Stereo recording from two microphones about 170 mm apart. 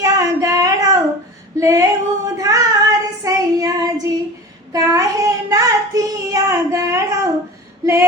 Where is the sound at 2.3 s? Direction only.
20° right (ahead or behind).